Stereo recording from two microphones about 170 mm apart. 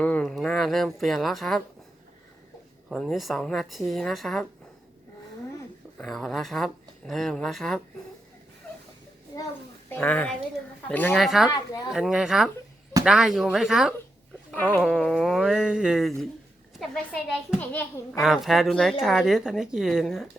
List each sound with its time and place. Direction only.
0.0 s a woman's voice: 5° left (ahead or behind)
2.9 s speech: centre (ahead or behind)
6.0 s speech: centre (ahead or behind)
9.3 s a sound: 20° left (ahead or behind)
9.9 s a child's voice: 10° left (ahead or behind)
11.1 s speech: centre (ahead or behind)
11.4 s speech: 25° left (ahead or behind)
11.9 s speech: 5° right (ahead or behind)
14.5 s a child's voice: 10° left (ahead or behind)
18.2 s speech: centre (ahead or behind)